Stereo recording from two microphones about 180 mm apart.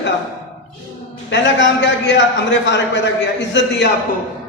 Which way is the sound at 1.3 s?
85° left.